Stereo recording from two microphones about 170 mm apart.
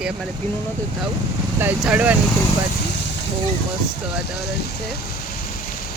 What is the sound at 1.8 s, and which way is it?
Speech, 10° right (ahead or behind).